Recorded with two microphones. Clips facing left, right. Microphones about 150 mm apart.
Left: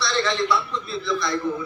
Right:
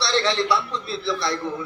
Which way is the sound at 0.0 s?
30° right (ahead or behind).